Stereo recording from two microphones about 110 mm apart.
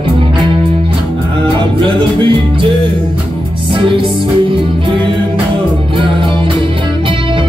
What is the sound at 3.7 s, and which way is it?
Music, 50° right (ahead or behind).